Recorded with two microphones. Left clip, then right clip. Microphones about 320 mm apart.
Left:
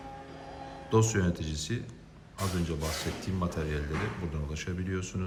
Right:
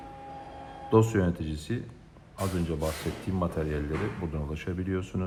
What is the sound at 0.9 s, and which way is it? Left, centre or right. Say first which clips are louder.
Speech: right 4 dB; centre.